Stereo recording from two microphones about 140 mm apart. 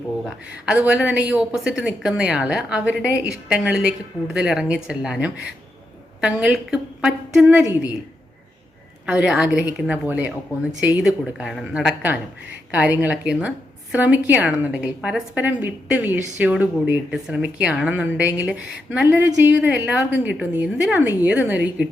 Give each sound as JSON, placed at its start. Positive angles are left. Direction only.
{"t": 0.3, "sound": "a woman's voice", "side_deg": -5}
{"t": 9.0, "sound": "a woman's voice", "side_deg": -5}